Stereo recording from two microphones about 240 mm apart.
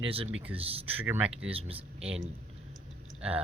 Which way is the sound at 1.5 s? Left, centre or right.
Right.